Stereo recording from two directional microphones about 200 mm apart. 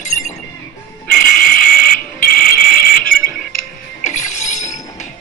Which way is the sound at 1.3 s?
45° left (ahead or behind).